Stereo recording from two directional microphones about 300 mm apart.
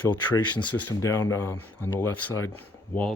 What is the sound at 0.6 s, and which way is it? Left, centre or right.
Speech, left.